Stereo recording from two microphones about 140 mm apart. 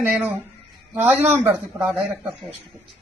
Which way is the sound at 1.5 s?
10° right (ahead or behind).